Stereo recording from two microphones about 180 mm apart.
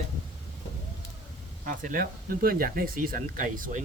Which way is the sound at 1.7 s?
50° right (ahead or behind).